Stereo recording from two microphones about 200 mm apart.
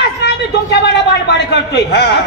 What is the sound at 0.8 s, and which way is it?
A man's voice, 60° left (ahead or behind).